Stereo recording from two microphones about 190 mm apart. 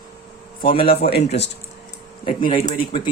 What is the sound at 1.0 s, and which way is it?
Speech, 60° left (ahead or behind).